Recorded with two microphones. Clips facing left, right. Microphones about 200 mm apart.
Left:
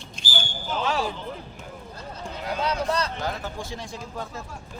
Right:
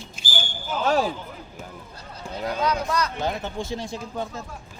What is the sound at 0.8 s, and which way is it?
Speech, 45° right (ahead or behind).